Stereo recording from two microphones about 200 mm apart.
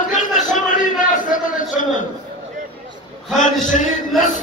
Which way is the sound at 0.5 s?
40° left (ahead or behind).